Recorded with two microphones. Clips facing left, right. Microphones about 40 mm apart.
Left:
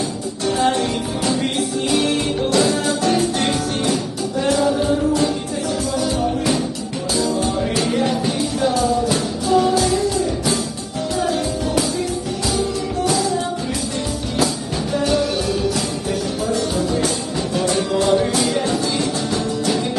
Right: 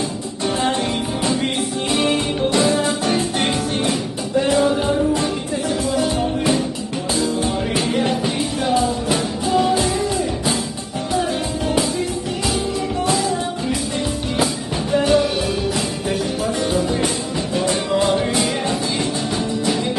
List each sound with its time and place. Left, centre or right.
1.5 s music: right
6.0 s music: right
14.9 s music: right
16.7 s music: right